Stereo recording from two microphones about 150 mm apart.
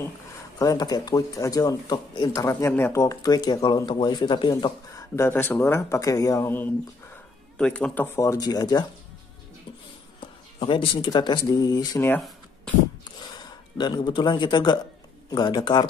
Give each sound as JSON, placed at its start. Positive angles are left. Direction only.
{"t": 0.6, "sound": "speech", "side_deg": 25}
{"t": 5.1, "sound": "speech", "side_deg": 15}
{"t": 10.6, "sound": "speech", "side_deg": 35}
{"t": 13.7, "sound": "speech", "side_deg": 30}